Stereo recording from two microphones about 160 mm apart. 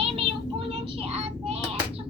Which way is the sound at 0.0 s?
35° right (ahead or behind).